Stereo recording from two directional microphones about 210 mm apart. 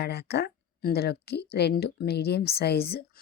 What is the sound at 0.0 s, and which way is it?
Speech, 50° left (ahead or behind).